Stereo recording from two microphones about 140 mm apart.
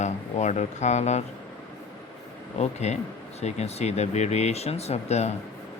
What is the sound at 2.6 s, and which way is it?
Speech, 50° left (ahead or behind).